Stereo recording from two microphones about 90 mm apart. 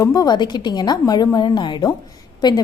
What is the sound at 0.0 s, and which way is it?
A woman's voice, 40° left (ahead or behind).